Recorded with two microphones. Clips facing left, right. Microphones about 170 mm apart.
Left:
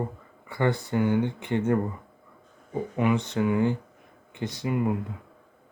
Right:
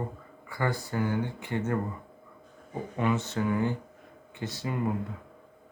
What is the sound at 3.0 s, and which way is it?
Speech, 15° left (ahead or behind).